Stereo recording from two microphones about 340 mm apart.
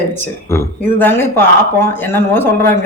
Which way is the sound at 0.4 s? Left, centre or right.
Centre.